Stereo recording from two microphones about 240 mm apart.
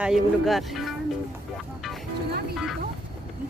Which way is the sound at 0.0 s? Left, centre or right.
Centre.